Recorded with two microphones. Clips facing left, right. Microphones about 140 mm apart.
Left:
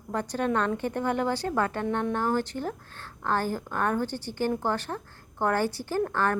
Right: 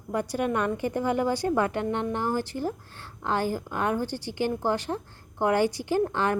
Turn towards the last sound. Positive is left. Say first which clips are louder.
# right 2 dB
turn(degrees=-15)  # may be behind; listen again after turning